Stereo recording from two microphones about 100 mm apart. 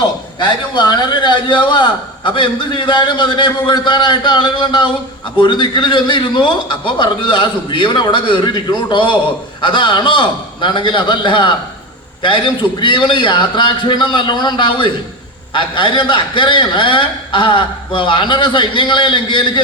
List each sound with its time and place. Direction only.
0.3 s a man's voice: 50° left (ahead or behind)
12.8 s a man's voice: 55° left (ahead or behind)